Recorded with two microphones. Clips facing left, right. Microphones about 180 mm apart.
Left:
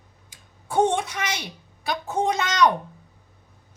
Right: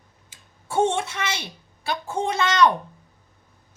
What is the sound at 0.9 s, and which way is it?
Speech, 15° left (ahead or behind).